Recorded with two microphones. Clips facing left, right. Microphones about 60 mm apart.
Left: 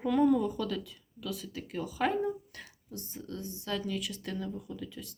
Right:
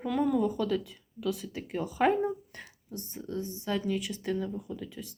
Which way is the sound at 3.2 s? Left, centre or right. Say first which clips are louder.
Right 6 dB; centre.